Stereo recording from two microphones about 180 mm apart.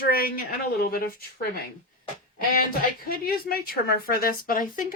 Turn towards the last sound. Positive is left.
turn(degrees=50)  # may be behind; listen again after turning